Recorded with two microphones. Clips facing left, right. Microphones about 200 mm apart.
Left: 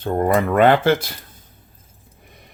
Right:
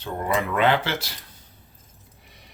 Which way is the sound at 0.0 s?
50° left (ahead or behind).